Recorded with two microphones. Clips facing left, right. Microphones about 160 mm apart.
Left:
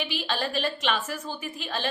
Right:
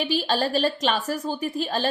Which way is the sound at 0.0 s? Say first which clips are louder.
Right 6 dB; 35° right (ahead or behind).